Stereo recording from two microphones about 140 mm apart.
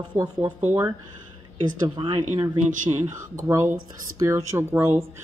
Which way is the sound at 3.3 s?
20° right (ahead or behind).